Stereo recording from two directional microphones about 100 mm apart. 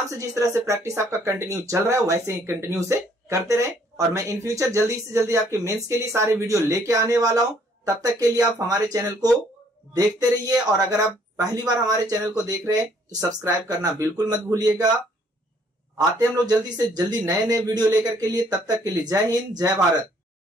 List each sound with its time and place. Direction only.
0.2 s speech: 30° right (ahead or behind)
16.2 s speech: 40° right (ahead or behind)